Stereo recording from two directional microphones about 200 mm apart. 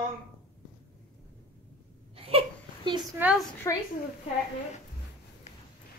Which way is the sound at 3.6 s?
15° left (ahead or behind).